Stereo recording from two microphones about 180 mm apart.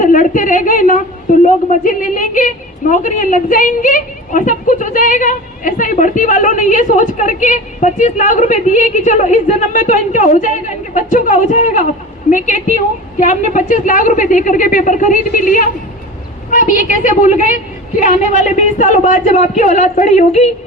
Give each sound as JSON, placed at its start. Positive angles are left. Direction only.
{"t": 0.0, "sound": "a woman's voice", "side_deg": 45}